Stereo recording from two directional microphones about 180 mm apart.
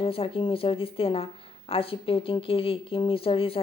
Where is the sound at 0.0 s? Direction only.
30° left (ahead or behind).